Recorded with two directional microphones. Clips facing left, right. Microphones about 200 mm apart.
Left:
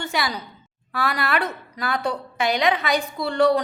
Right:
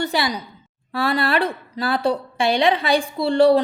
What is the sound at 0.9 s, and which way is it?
A woman's voice, 30° right (ahead or behind).